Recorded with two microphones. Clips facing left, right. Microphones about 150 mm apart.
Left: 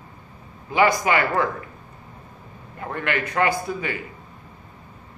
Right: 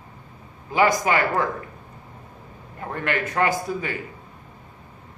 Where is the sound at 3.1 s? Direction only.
40° right (ahead or behind).